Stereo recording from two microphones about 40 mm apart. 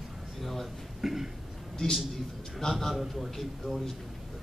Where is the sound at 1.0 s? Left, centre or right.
Centre.